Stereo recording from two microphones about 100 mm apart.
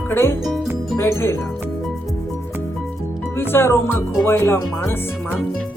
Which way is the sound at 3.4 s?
25° left (ahead or behind).